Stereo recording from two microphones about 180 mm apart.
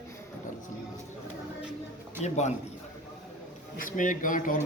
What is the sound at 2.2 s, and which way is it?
Speech, 40° left (ahead or behind).